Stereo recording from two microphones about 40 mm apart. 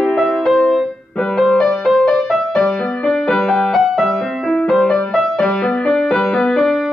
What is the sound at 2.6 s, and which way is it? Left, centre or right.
Music, left.